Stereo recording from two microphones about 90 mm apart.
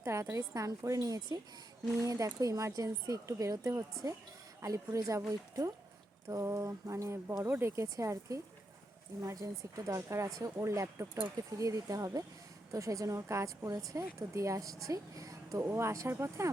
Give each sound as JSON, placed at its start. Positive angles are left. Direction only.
{"t": 0.0, "sound": "speech", "side_deg": -30}
{"t": 6.2, "sound": "speech", "side_deg": -35}